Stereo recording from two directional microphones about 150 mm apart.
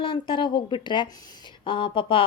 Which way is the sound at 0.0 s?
35° left (ahead or behind).